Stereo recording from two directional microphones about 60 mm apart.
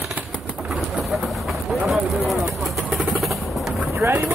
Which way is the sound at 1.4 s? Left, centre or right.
Centre.